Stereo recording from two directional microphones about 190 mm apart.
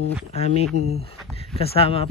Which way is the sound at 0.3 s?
35° left (ahead or behind).